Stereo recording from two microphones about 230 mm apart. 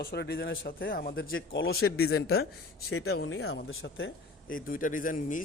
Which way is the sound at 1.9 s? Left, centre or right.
Left.